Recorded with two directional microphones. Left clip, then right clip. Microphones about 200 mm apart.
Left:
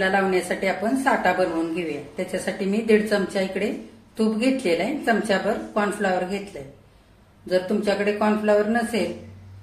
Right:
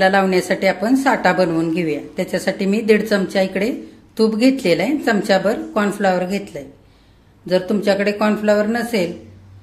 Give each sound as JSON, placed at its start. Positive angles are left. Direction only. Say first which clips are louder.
{"t": 0.0, "sound": "a woman's voice", "louder": "right 6 dB", "side_deg": -50}
{"t": 7.4, "sound": "a woman's voice", "louder": "right 5 dB", "side_deg": -45}